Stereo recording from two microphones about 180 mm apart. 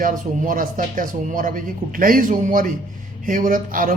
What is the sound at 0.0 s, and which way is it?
Speech, 50° right (ahead or behind).